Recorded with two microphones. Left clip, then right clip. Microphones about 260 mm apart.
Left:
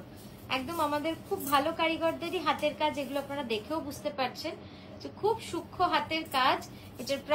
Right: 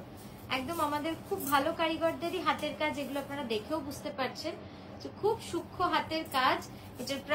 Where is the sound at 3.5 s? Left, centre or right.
Left.